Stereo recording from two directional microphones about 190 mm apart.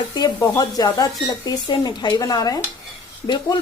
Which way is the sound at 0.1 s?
20° left (ahead or behind).